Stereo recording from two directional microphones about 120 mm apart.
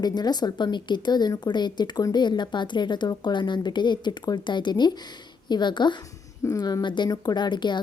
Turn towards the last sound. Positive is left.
turn(degrees=40)  # may be behind; listen again after turning